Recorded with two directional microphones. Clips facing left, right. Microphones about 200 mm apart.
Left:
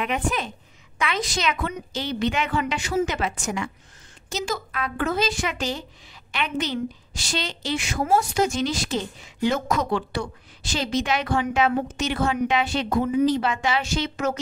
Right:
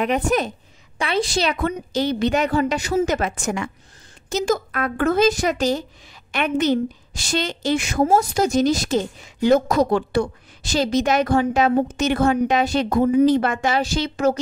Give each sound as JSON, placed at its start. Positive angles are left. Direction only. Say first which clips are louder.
{"t": 0.0, "sound": "a woman's voice", "louder": "right 6 dB", "side_deg": -40}